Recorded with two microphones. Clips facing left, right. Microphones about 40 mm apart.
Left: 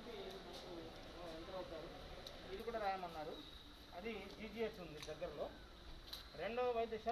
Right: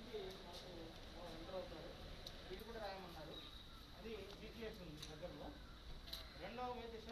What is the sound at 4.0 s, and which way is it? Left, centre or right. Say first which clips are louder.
Speech: left 4 dB; left.